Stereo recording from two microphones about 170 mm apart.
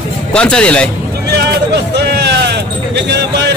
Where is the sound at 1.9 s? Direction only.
80° right.